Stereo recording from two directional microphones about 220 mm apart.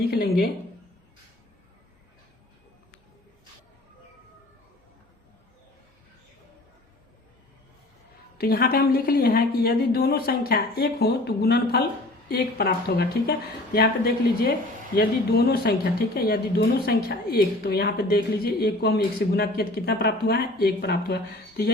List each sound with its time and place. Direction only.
0.1 s speech: 45° left (ahead or behind)
8.4 s speech: 45° left (ahead or behind)